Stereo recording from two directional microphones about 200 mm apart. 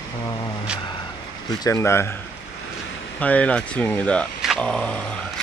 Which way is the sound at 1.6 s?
15° left (ahead or behind).